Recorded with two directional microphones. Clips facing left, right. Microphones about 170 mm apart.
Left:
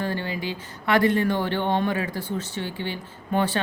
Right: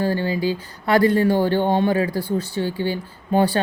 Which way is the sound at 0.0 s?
35° right (ahead or behind).